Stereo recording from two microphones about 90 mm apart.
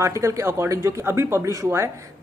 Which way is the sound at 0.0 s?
35° right (ahead or behind).